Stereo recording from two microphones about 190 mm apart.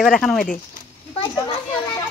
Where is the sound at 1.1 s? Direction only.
25° left (ahead or behind).